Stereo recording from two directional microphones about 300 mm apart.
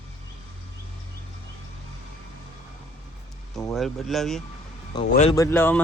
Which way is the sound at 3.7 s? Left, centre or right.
Centre.